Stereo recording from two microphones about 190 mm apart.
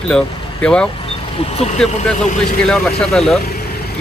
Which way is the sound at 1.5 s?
35° left (ahead or behind).